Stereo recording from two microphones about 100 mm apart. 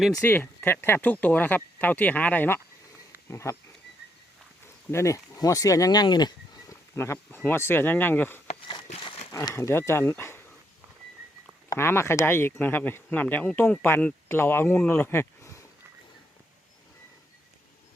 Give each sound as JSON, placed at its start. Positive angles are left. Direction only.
{"t": 0.2, "sound": "speech", "side_deg": 20}
{"t": 3.2, "sound": "speech", "side_deg": 30}
{"t": 4.9, "sound": "speech", "side_deg": 30}
{"t": 6.9, "sound": "speech", "side_deg": 25}
{"t": 8.6, "sound": "a sound", "side_deg": 55}
{"t": 9.3, "sound": "speech", "side_deg": 40}
{"t": 9.6, "sound": "speech", "side_deg": 25}
{"t": 11.7, "sound": "speech", "side_deg": 25}